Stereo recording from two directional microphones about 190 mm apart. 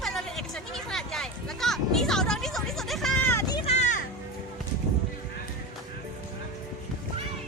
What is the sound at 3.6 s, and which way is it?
Music, 35° left (ahead or behind).